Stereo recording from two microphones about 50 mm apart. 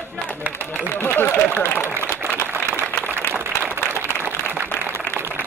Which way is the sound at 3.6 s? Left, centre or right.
Right.